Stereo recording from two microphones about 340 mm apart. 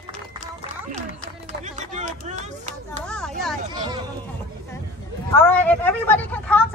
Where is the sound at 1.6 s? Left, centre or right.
Right.